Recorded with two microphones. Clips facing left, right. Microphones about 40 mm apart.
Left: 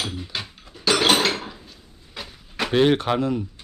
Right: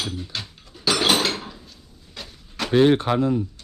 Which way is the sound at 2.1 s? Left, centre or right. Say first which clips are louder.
Left 3 dB; centre.